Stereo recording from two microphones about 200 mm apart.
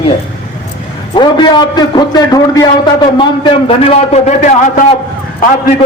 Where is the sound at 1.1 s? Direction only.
20° left (ahead or behind); by 4.8 s 40° left (ahead or behind).